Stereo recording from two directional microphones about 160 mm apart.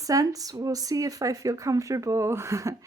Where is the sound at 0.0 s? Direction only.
20° right (ahead or behind).